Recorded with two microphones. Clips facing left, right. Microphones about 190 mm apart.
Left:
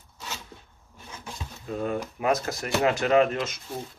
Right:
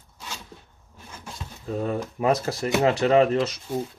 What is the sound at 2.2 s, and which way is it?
Speech, 30° right (ahead or behind).